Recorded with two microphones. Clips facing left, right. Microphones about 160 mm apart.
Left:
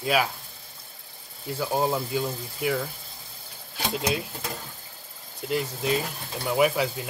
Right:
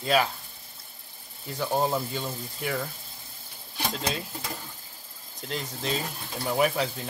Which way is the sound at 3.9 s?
10° left (ahead or behind).